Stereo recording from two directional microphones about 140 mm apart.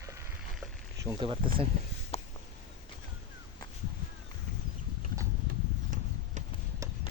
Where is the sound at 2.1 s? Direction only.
50° left (ahead or behind).